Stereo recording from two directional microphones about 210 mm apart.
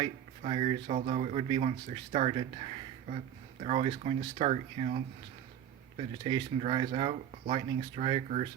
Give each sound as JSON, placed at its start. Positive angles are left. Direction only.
{"t": 0.0, "sound": "speech", "side_deg": -25}